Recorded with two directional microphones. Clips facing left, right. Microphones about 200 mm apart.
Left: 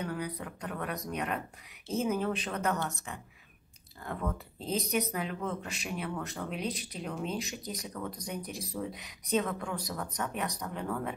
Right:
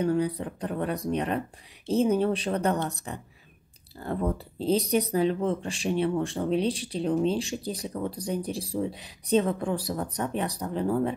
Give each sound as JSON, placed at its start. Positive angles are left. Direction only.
{"t": 0.0, "sound": "speech", "side_deg": -30}